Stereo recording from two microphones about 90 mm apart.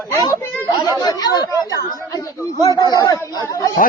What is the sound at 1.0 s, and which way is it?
Speech, 50° left (ahead or behind).